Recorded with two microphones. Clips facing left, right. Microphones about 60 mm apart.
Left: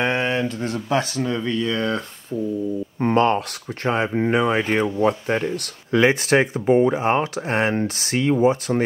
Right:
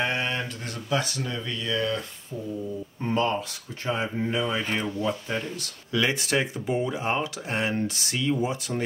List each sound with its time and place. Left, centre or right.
0.3 s speech: left
3.0 s speech: left